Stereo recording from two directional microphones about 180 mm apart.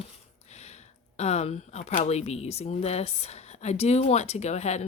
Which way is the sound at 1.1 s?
35° left (ahead or behind).